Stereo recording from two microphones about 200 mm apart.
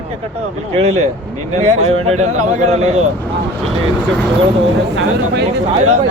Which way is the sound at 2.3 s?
90° right.